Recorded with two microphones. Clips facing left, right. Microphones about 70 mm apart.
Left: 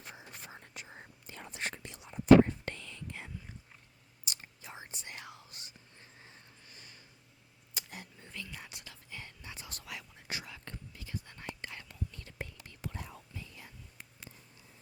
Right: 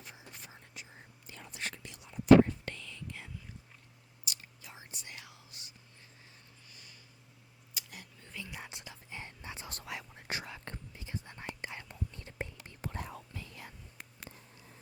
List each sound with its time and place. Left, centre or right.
0.0 s whispering: left
1.3 s whispering: left
4.3 s whispering: left
6.7 s a sound: left
8.3 s whispering: centre
10.2 s whispering: right
12.8 s whispering: right